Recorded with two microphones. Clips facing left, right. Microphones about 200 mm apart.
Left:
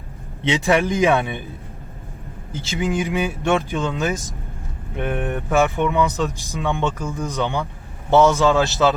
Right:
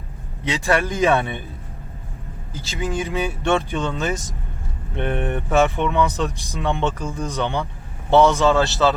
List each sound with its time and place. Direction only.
0.5 s speech: 15° left (ahead or behind)
2.6 s speech: 15° left (ahead or behind)
5.5 s speech: 15° left (ahead or behind)
6.1 s speech: centre (ahead or behind)
6.6 s speech: 15° left (ahead or behind)
8.2 s speech: 15° right (ahead or behind)
8.4 s speech: 15° left (ahead or behind)